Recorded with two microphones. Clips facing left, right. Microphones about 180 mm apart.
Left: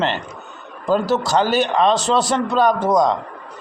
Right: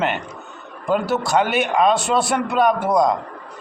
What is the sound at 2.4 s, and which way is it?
Speech, 35° left (ahead or behind).